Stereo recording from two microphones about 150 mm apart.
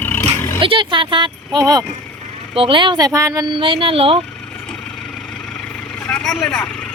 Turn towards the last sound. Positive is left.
turn(degrees=5)  # may be behind; listen again after turning